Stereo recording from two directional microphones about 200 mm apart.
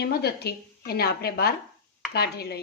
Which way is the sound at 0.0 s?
55° left (ahead or behind).